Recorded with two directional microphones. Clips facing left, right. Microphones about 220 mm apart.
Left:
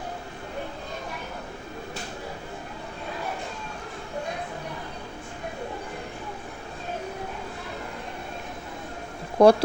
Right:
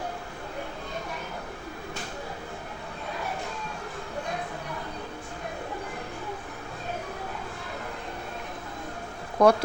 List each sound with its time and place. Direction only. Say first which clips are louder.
9.4 s speech: left 4 dB; 30° left (ahead or behind)